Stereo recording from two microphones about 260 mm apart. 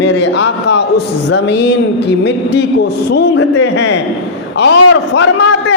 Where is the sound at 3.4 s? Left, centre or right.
Left.